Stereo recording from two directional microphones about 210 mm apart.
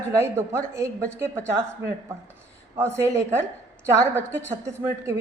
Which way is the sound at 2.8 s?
15° right (ahead or behind).